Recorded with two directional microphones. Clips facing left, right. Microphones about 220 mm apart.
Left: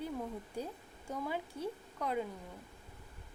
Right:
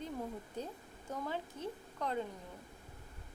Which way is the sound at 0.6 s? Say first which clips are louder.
Left 2 dB; 10° left (ahead or behind).